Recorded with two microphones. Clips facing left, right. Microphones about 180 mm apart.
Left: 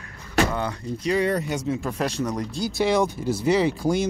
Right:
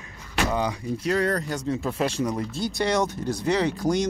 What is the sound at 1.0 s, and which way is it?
Speech, centre (ahead or behind).